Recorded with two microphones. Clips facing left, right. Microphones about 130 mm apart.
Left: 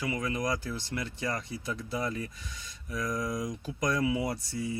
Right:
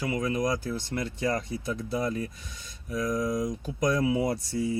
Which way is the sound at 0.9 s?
35° right (ahead or behind).